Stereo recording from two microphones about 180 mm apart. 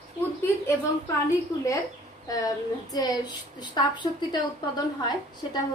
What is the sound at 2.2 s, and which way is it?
Speech, 20° left (ahead or behind).